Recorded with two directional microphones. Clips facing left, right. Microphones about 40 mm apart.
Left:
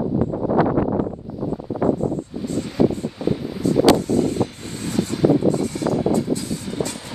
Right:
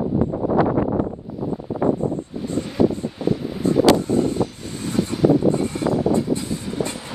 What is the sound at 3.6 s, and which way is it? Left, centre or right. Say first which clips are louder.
Vehicle: even; right.